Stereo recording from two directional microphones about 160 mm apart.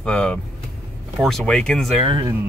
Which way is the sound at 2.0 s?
30° right (ahead or behind).